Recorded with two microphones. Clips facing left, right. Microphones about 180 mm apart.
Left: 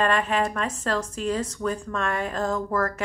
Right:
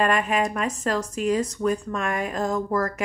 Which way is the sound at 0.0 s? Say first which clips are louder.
Right 1 dB; 10° right (ahead or behind).